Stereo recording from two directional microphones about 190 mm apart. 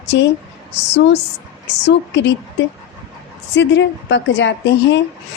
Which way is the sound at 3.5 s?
70° left (ahead or behind).